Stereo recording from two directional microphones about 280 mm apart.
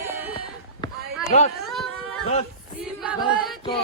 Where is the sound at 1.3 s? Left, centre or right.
Left.